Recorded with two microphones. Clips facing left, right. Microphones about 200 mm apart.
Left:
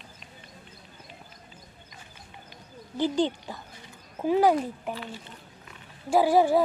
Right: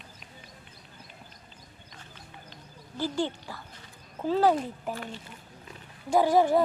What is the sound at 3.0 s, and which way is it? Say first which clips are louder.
Speech: left 5 dB; 20° left (ahead or behind).